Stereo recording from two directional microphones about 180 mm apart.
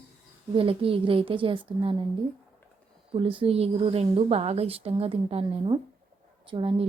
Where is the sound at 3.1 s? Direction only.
30° right (ahead or behind).